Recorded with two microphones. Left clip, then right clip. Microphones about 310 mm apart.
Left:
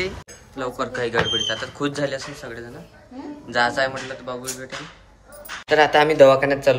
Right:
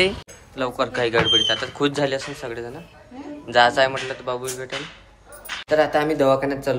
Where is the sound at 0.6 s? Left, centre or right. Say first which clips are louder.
Right 3 dB; centre.